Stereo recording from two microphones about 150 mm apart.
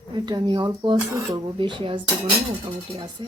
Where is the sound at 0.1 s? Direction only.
30° right (ahead or behind).